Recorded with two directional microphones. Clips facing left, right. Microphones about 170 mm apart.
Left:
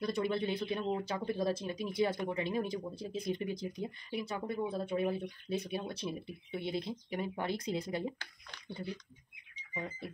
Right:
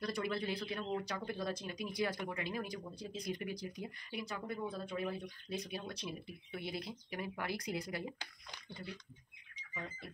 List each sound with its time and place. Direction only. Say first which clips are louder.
0.0 s speech: left 5 dB; 25° left (ahead or behind)